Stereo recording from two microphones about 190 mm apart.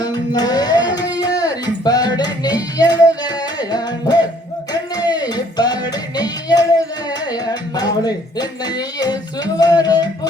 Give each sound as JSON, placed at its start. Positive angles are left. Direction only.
{"t": 0.0, "sound": "music", "side_deg": 20}
{"t": 7.1, "sound": "speech", "side_deg": 20}